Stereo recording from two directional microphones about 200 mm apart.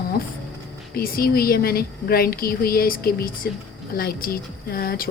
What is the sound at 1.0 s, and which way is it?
Speech, 50° left (ahead or behind).